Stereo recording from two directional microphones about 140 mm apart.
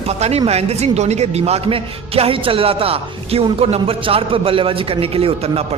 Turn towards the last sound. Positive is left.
turn(degrees=-45)  # may be behind; listen again after turning